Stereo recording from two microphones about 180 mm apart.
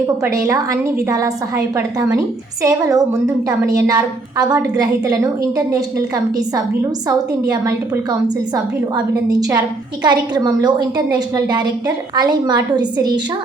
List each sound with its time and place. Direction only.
0.3 s a woman's voice: 20° right (ahead or behind)
7.1 s a woman's voice: 20° right (ahead or behind)
10.0 s a woman's voice: 25° right (ahead or behind)